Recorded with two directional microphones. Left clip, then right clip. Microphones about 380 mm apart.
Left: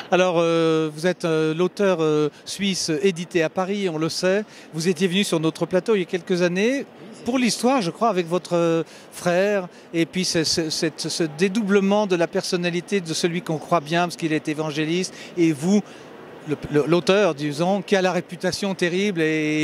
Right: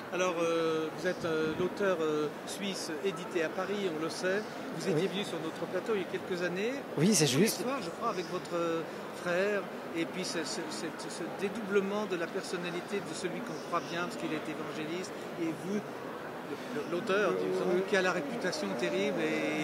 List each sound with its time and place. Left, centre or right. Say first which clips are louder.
0.1 s speech: left 12 dB; left
5.9 s a man's voice: left 12 dB; left
16.9 s a man's voice: left 10 dB; left